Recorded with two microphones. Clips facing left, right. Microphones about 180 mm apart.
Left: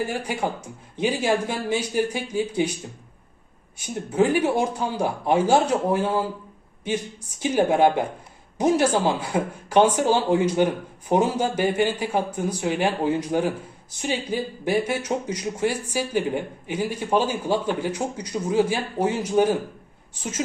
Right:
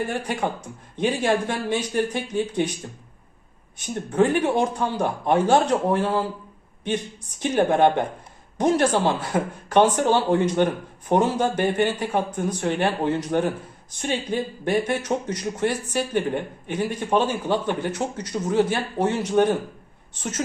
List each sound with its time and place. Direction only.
0.0 s speech: 10° left (ahead or behind)
3.8 s speech: 10° left (ahead or behind)
7.4 s speech: 10° left (ahead or behind)